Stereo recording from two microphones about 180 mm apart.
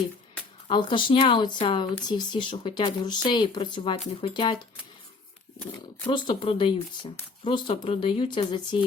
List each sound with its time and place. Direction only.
0.7 s speech: 25° left (ahead or behind)
6.1 s speech: 25° left (ahead or behind)